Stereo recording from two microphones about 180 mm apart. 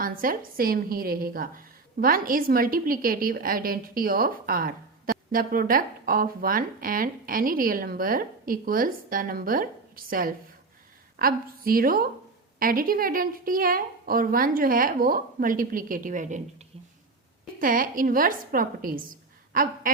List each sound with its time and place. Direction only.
0.0 s a woman's voice: 50° right (ahead or behind)